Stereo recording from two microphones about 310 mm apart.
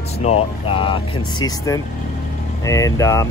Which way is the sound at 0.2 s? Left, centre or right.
Centre.